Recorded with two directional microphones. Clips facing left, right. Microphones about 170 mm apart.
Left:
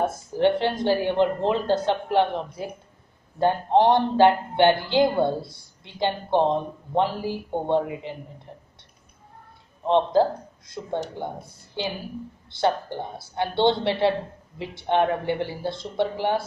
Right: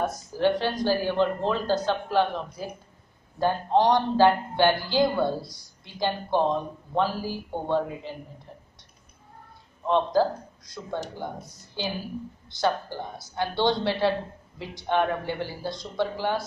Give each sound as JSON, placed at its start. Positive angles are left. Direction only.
{"t": 0.0, "sound": "speech", "side_deg": 25}
{"t": 9.8, "sound": "speech", "side_deg": 25}